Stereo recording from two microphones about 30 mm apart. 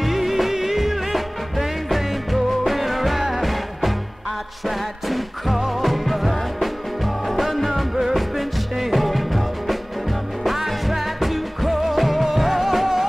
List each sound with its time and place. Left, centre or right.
0.0 s music: centre